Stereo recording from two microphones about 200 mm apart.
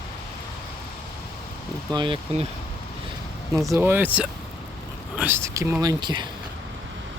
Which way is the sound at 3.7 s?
10° right (ahead or behind).